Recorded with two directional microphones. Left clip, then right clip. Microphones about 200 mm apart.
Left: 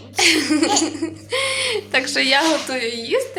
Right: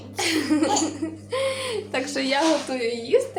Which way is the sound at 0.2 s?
30° left (ahead or behind).